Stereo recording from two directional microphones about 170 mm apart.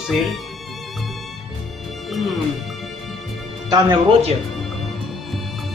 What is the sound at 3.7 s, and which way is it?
Speech, 25° right (ahead or behind).